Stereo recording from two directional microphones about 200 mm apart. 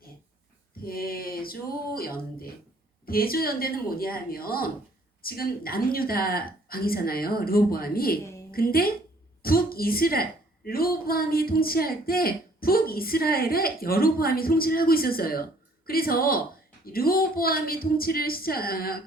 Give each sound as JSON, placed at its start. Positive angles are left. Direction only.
{"t": 0.9, "sound": "a woman's voice", "side_deg": 50}